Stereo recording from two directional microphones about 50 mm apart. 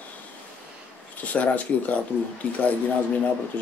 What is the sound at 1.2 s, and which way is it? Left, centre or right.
Speech, left.